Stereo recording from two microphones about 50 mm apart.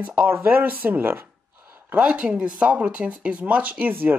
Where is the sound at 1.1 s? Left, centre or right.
Right.